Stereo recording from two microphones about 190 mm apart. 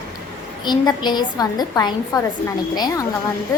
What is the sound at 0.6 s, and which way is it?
A woman's voice, 20° left (ahead or behind).